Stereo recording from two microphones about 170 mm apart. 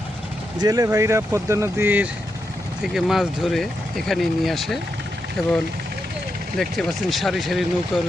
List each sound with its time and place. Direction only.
0.6 s speech: 20° right (ahead or behind)
2.8 s speech: centre (ahead or behind)
6.6 s speech: centre (ahead or behind)